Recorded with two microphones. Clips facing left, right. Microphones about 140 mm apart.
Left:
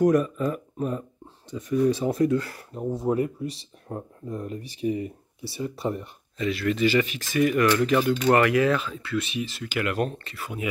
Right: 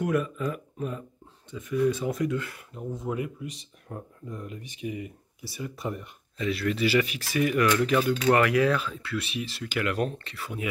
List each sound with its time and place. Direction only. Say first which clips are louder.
0.0 s speech: left 6 dB; 40° left (ahead or behind)
6.3 s speech: left 2 dB; centre (ahead or behind)